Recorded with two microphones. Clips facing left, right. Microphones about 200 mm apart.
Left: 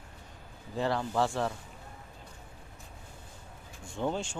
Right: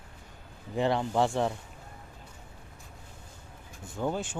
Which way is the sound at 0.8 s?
20° right (ahead or behind).